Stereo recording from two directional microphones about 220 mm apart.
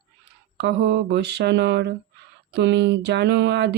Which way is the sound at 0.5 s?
50° right (ahead or behind).